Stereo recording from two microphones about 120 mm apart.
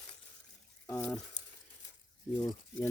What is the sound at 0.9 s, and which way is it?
Speech, 25° left (ahead or behind).